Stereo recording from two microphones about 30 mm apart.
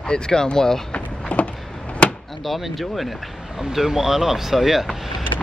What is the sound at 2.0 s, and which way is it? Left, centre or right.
Door, left.